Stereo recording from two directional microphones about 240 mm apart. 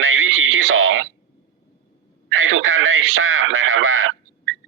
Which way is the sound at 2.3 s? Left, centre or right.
Right.